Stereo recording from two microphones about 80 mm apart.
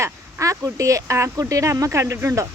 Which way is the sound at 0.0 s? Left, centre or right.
Right.